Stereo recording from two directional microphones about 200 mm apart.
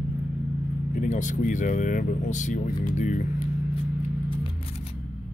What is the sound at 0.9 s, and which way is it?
Speech, 40° left (ahead or behind).